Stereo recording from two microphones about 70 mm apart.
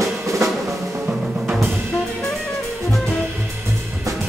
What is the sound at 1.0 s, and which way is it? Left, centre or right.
Music, centre.